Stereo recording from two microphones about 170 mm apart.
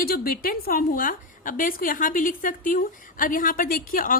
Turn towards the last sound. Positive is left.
turn(degrees=55)  # may be behind; listen again after turning